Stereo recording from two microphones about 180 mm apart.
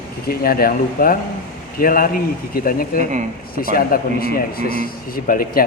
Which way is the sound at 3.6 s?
55° left (ahead or behind).